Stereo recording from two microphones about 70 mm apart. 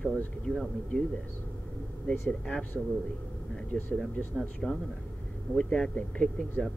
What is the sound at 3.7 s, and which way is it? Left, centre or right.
Speech, centre.